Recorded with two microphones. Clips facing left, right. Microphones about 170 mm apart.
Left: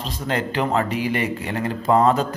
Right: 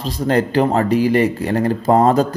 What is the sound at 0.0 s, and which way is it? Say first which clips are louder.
A man's voice: right 8 dB; 40° right (ahead or behind).